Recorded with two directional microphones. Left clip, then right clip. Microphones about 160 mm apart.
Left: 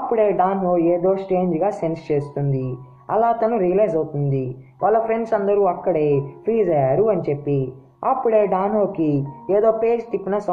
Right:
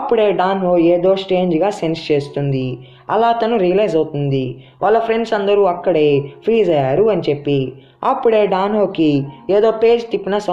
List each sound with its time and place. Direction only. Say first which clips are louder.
0.1 s speech: right 3 dB; 40° right (ahead or behind)